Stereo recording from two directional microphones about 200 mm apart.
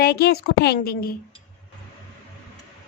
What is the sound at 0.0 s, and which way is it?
A woman's voice, 50° left (ahead or behind).